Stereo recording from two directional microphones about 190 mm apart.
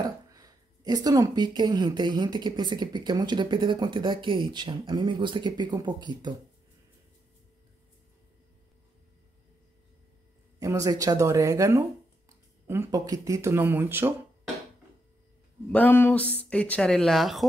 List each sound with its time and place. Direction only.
0.0 s a woman's voice: 20° right (ahead or behind)
10.6 s speech: 15° right (ahead or behind)
15.7 s speech: 10° left (ahead or behind)